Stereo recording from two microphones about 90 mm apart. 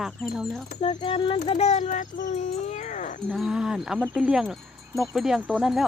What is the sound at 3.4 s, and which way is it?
Speech, 5° right (ahead or behind).